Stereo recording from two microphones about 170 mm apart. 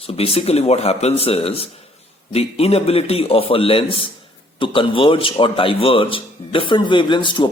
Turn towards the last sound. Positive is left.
turn(degrees=25)  # may be behind; listen again after turning